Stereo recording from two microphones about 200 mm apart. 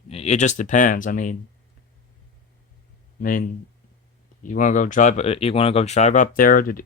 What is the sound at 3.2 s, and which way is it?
Speech, 45° left (ahead or behind).